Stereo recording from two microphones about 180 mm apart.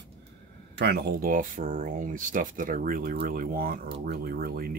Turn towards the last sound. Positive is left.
turn(degrees=-55)  # may be behind; listen again after turning